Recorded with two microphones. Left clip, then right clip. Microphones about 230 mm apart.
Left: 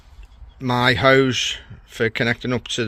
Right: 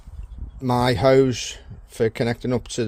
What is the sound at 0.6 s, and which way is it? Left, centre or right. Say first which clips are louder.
Speech: left 2 dB; centre.